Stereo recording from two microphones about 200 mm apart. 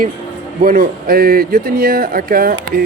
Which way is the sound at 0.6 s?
45° right (ahead or behind).